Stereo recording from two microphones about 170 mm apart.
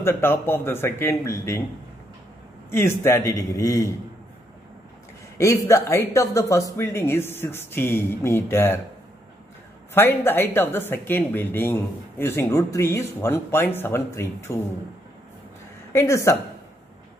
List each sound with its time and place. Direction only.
0.0 s speech: 15° left (ahead or behind)
2.7 s speech: 15° left (ahead or behind)
5.4 s speech: 15° left (ahead or behind)
9.9 s speech: 10° left (ahead or behind)
15.9 s speech: 15° left (ahead or behind)